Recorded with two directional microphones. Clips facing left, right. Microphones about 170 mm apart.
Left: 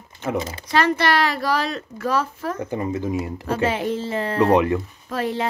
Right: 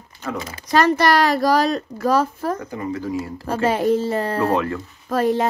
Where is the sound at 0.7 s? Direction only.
40° right (ahead or behind).